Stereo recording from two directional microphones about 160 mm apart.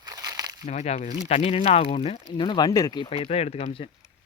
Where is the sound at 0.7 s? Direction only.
45° left (ahead or behind).